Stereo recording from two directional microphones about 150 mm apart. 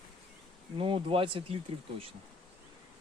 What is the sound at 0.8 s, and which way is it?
Speech, 40° right (ahead or behind).